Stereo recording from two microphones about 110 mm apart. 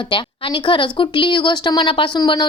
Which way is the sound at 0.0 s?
50° left (ahead or behind).